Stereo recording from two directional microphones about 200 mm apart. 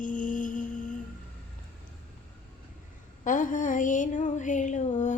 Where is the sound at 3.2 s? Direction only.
40° left (ahead or behind).